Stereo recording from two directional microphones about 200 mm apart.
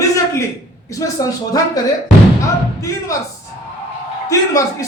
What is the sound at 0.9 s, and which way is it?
Speech, 15° left (ahead or behind).